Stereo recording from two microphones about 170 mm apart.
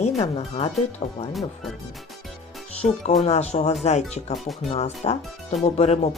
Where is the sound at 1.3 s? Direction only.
Centre (ahead or behind).